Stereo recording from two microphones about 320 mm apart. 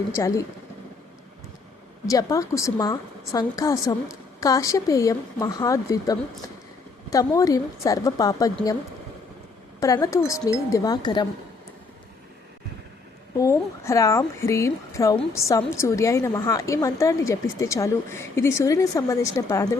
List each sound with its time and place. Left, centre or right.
0.2 s speech: centre
2.0 s speech: centre
9.8 s speech: centre
13.3 s speech: centre